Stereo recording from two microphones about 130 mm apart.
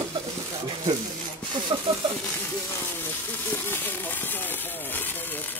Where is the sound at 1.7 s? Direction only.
35° right (ahead or behind).